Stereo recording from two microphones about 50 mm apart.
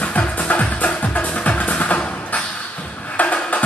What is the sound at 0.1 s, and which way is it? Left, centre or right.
Music, left.